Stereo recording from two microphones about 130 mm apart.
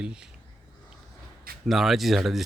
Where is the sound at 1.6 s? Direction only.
Centre (ahead or behind).